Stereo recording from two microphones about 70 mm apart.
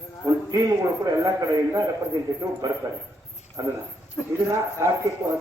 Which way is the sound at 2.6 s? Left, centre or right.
Right.